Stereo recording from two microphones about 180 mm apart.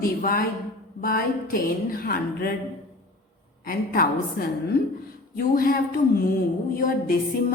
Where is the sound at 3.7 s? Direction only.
55° left (ahead or behind).